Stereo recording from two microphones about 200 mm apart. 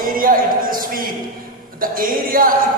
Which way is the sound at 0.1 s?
45° right (ahead or behind).